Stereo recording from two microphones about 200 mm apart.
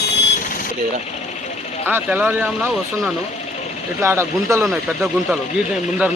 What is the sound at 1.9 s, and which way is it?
Speech, 10° right (ahead or behind).